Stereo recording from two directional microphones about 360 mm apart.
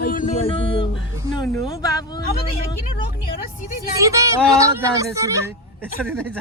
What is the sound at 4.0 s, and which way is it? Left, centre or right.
Speech, centre.